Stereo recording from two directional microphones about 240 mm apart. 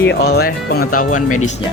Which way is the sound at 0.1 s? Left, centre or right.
Left.